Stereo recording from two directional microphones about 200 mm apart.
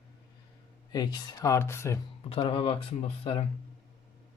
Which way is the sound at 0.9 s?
20° left (ahead or behind).